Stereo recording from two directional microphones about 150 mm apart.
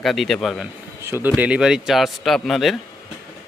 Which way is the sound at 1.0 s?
15° right (ahead or behind).